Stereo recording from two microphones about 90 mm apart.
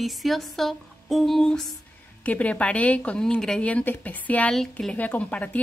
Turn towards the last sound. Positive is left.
turn(degrees=15)  # may be behind; listen again after turning